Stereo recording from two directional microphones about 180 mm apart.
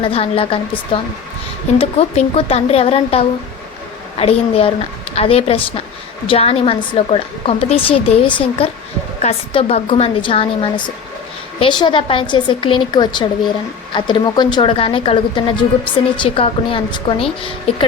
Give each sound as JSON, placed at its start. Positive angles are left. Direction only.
{"t": 0.0, "sound": "a woman's voice", "side_deg": 30}
{"t": 1.8, "sound": "a woman's voice", "side_deg": 35}